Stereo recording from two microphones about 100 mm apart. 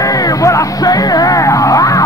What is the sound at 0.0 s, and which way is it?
Music, 35° left (ahead or behind).